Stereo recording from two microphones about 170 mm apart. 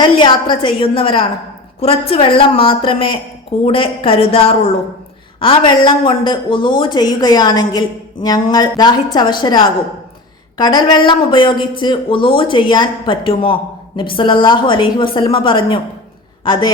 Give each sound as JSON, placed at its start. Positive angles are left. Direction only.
{"t": 0.0, "sound": "a woman's voice", "side_deg": 30}
{"t": 10.6, "sound": "speech", "side_deg": 25}